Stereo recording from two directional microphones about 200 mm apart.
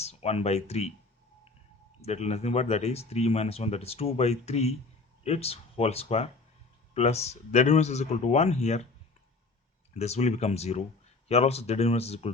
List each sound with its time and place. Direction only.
0.0 s speech: 30° left (ahead or behind)
2.0 s speech: 35° left (ahead or behind)
9.9 s speech: 30° left (ahead or behind)